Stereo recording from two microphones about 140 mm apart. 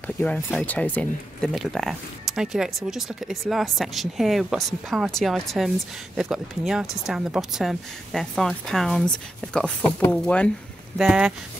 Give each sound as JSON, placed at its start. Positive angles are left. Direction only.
{"t": 0.0, "sound": "speech", "side_deg": 10}
{"t": 11.0, "sound": "speech", "side_deg": -5}